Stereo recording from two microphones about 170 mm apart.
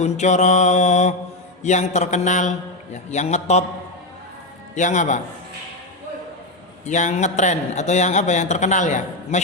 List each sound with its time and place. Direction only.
0.0 s a man's voice: 45° left (ahead or behind)
4.7 s a man's voice: 45° left (ahead or behind)
6.8 s a man's voice: 45° left (ahead or behind)